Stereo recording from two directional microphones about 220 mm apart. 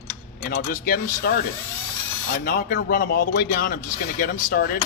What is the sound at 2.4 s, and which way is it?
Speech, 45° left (ahead or behind).